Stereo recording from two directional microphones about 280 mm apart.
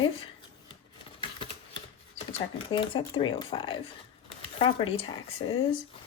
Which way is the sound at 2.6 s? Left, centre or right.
Centre.